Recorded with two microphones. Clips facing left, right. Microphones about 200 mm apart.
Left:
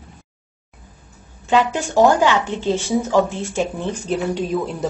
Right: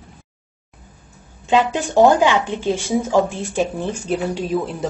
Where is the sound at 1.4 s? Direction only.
20° right (ahead or behind); by 4.9 s centre (ahead or behind).